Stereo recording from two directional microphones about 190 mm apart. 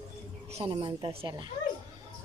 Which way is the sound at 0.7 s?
25° right (ahead or behind).